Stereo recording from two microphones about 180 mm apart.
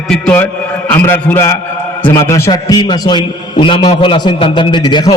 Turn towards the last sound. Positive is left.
turn(degrees=25)  # may be behind; listen again after turning